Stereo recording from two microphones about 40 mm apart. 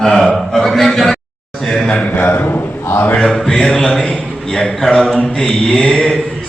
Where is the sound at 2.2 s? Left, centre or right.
Left.